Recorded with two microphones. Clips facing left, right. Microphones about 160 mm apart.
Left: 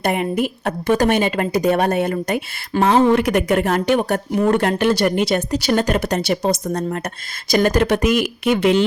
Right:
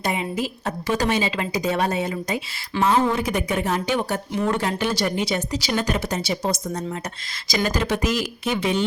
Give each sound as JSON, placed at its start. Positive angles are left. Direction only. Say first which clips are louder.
{"t": 0.0, "sound": "a woman's voice", "louder": "left 6 dB", "side_deg": 60}